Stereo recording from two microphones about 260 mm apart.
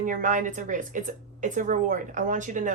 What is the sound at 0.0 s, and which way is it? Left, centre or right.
A woman's voice, right.